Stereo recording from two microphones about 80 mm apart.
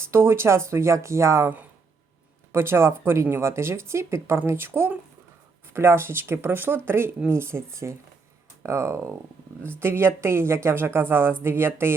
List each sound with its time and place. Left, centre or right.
0.0 s speech: right
2.5 s speech: right